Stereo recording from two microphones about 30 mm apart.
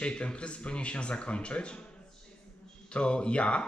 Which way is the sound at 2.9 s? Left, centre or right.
Left.